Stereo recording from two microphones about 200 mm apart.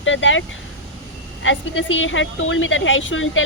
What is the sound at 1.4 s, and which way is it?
Speech, 75° left (ahead or behind).